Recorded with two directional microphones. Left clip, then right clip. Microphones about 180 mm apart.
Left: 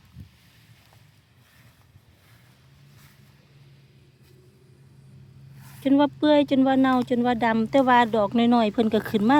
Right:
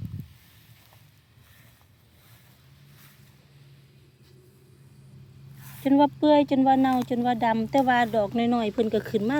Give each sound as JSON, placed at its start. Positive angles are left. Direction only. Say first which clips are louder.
{"t": 5.8, "sound": "speech", "louder": "even", "side_deg": 25}